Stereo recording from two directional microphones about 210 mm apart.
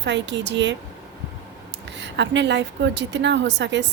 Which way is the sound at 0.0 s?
60° right (ahead or behind).